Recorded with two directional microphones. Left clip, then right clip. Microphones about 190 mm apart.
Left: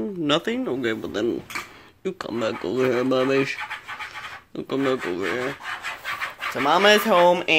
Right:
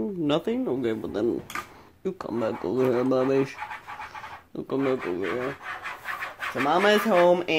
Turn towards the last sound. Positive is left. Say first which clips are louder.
# left 3 dB
turn(degrees=10)  # may be behind; listen again after turning